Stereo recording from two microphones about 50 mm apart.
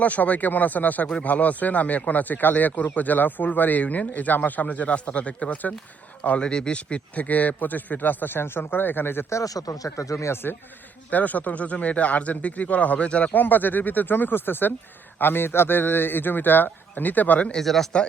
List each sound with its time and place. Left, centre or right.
0.0 s speech: left
9.9 s speech: left
11.1 s speech: left
13.3 s speech: left
17.6 s speech: centre